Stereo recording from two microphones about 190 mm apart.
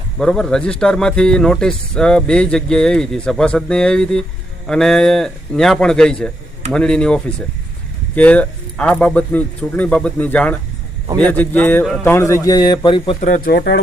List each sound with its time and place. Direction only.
0.2 s a man's voice: 5° left (ahead or behind); by 13.1 s 25° left (ahead or behind)
13.2 s speech: 45° left (ahead or behind)